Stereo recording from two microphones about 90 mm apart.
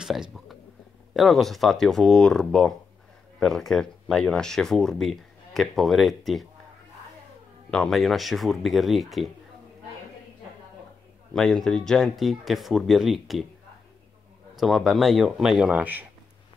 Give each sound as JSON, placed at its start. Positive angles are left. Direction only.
{"t": 0.0, "sound": "speech", "side_deg": -5}
{"t": 7.7, "sound": "speech", "side_deg": 5}
{"t": 11.3, "sound": "speech", "side_deg": 5}
{"t": 14.6, "sound": "speech", "side_deg": 0}
{"t": 15.7, "sound": "speech", "side_deg": -20}